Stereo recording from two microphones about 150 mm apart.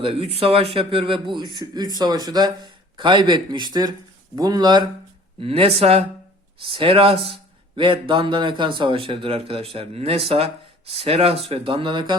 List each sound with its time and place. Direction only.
0.0 s a man's voice: 40° right (ahead or behind)
5.4 s a man's voice: 40° right (ahead or behind)